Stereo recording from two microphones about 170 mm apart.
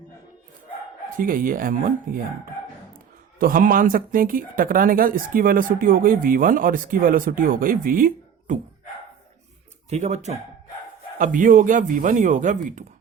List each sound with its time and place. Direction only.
1.1 s speech: 55° right (ahead or behind)
3.3 s speech: 55° right (ahead or behind)
9.9 s speech: 40° right (ahead or behind)